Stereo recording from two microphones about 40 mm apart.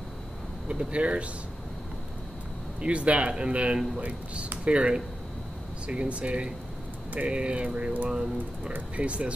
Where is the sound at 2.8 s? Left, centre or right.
Right.